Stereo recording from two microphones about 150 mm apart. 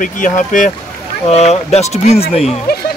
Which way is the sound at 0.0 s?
60° left (ahead or behind).